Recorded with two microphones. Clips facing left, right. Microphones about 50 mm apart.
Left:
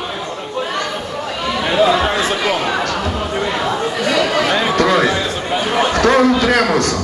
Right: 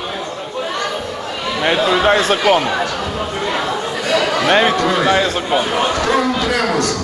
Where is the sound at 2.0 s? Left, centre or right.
Right.